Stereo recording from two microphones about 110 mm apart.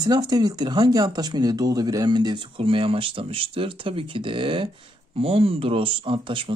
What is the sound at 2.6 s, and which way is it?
Speech, 55° right (ahead or behind).